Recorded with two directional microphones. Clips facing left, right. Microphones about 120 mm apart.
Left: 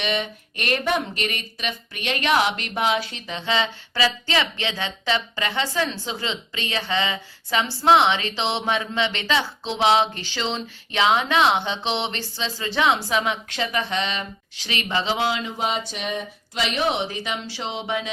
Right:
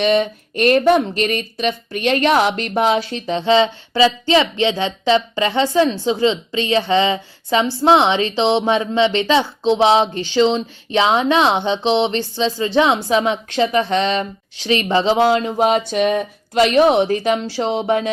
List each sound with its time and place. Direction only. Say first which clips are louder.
0.0 s speech: right 10 dB; 40° right (ahead or behind)